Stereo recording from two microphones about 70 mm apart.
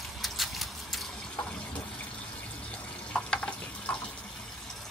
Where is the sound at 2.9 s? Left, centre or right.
Centre.